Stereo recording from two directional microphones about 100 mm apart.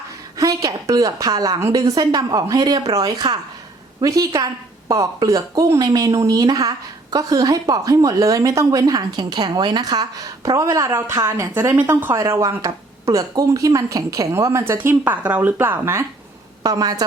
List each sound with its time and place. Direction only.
0.3 s a woman's voice: 35° right (ahead or behind)
11.7 s a woman's voice: 20° right (ahead or behind)
16.6 s a woman's voice: 40° right (ahead or behind)